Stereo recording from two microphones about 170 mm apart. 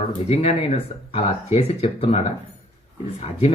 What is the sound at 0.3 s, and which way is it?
Speech, 35° left (ahead or behind).